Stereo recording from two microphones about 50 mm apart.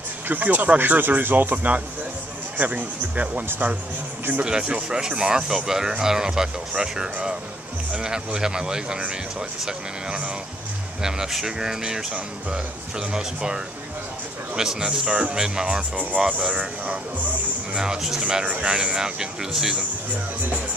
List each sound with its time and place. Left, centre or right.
0.3 s speech: right
4.5 s speech: centre
11.0 s speech: centre
13.1 s speech: centre
14.6 s speech: centre
17.7 s speech: centre
18.2 s speech: right